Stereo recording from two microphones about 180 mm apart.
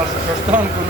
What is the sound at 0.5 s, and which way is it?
Speech, 5° right (ahead or behind).